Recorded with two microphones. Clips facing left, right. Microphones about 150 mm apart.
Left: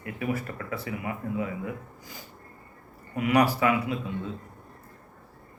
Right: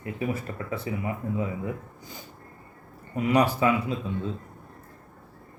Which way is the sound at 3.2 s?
25° right (ahead or behind).